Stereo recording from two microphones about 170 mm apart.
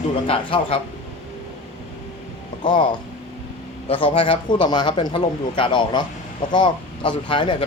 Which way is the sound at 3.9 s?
30° left (ahead or behind).